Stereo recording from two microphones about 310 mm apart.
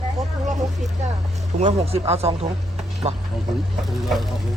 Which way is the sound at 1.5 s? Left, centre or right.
Right.